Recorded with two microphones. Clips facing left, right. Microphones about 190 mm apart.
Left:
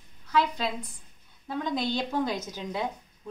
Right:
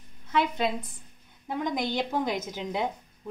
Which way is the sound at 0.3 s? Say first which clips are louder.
Right 1 dB; 20° right (ahead or behind).